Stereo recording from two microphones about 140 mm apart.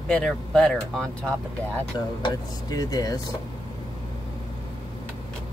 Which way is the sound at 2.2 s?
25° left (ahead or behind).